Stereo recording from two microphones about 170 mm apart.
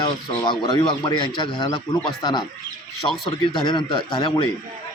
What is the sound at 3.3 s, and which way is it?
Speech, 25° left (ahead or behind).